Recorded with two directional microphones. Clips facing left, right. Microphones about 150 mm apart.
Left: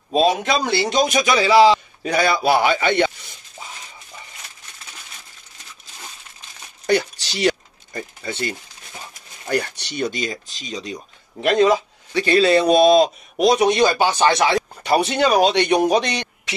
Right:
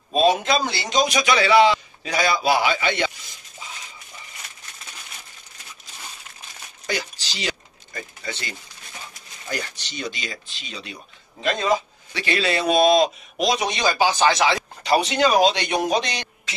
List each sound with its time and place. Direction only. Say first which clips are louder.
0.4 s speech: left 3 dB; 60° left (ahead or behind)
1.3 s speech: left 3 dB; 35° left (ahead or behind)
2.0 s a man's voice: left 3 dB; 55° left (ahead or behind)
6.9 s a sound: left 9 dB; 60° left (ahead or behind)
8.3 s speech: left 8 dB; 55° left (ahead or behind); by 11.0 s 40° left (ahead or behind)
11.4 s a man's voice: left 8 dB; 80° left
12.1 s speech: left 8 dB; 40° left (ahead or behind)
13.5 s speech: left 7 dB; 55° left (ahead or behind)